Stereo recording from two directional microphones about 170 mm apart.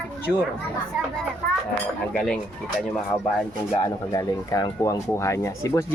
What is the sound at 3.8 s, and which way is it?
Speech, 20° left (ahead or behind).